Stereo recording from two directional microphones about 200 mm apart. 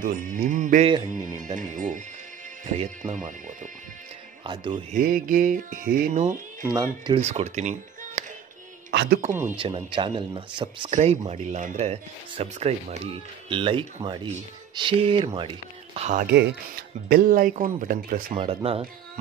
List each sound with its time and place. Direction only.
0.0 s speech: 40° right (ahead or behind)
0.8 s speech: 20° right (ahead or behind)
1.7 s speech: 40° right (ahead or behind)
4.5 s speech: 25° right (ahead or behind)
4.9 s speech: 45° right (ahead or behind)
6.6 s speech: 20° right (ahead or behind)
7.2 s speech: 35° right (ahead or behind)
8.9 s speech: 50° right (ahead or behind)
9.6 s speech: 25° right (ahead or behind)
17.1 s speech: 45° right (ahead or behind)
18.3 s speech: 25° right (ahead or behind)